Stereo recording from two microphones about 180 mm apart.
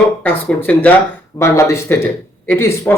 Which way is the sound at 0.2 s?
10° left (ahead or behind).